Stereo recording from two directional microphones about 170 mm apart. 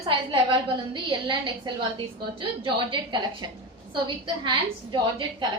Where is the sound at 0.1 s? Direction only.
30° right (ahead or behind).